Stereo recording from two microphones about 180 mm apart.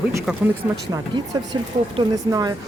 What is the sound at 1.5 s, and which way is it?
Speech, 25° right (ahead or behind).